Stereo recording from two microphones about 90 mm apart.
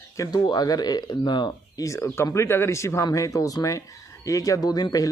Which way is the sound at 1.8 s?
35° left (ahead or behind).